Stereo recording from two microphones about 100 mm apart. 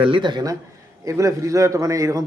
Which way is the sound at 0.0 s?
55° right (ahead or behind).